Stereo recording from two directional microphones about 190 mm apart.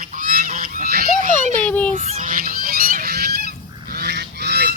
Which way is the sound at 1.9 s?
40° right (ahead or behind).